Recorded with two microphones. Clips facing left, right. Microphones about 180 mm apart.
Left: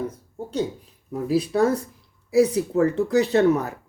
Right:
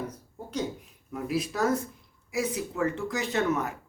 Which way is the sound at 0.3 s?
30° left (ahead or behind).